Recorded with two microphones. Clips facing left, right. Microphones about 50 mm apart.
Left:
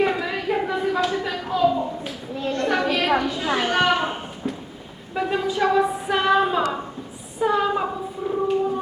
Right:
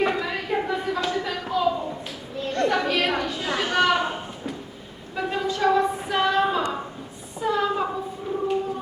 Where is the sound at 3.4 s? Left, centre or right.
Left.